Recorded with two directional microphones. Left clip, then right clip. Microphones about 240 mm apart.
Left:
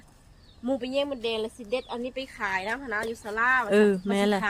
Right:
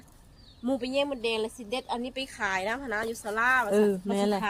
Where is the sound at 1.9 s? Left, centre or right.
Right.